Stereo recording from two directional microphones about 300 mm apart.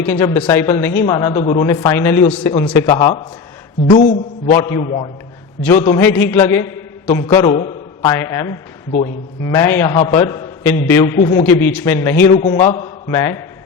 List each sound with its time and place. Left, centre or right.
0.0 s a man's voice: centre
4.5 s a man's voice: centre
11.2 s a man's voice: left
11.4 s a man's voice: centre
12.4 s a man's voice: left
12.6 s a man's voice: centre